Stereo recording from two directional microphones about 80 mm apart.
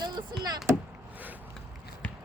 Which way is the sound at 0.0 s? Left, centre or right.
Right.